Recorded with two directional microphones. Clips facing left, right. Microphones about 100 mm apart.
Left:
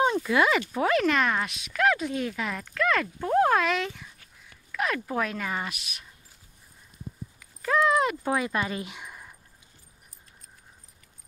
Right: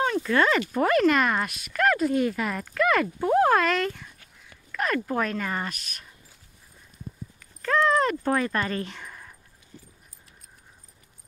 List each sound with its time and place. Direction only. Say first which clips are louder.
0.0 s speech: even; 15° left (ahead or behind)
7.6 s speech: right 1 dB; 10° left (ahead or behind)